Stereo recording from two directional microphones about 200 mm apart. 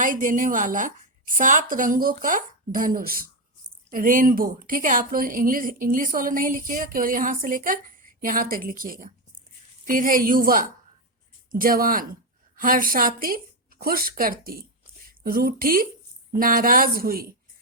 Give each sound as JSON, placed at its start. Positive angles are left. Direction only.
{"t": 0.0, "sound": "a woman's voice", "side_deg": -40}